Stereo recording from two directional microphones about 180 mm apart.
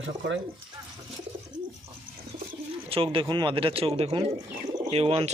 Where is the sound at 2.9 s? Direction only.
30° right (ahead or behind).